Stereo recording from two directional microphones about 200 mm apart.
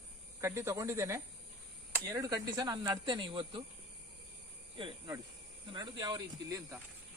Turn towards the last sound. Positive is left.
turn(degrees=-15)  # may be behind; listen again after turning